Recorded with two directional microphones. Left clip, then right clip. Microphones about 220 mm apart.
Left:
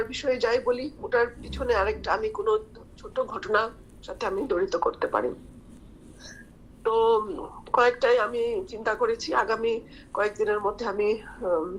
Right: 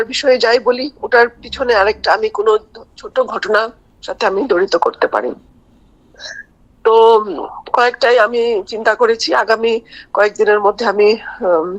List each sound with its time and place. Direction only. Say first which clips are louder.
0.0 s a woman's voice: right 14 dB; 45° right (ahead or behind)
6.8 s a woman's voice: right 14 dB; 50° right (ahead or behind)